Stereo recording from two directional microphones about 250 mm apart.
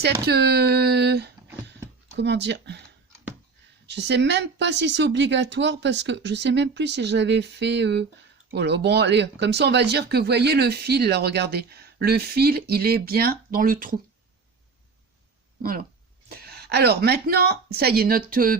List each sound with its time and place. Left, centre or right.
0.3 s speech: right
1.6 s a sound: right
3.8 s speech: right
16.3 s speech: right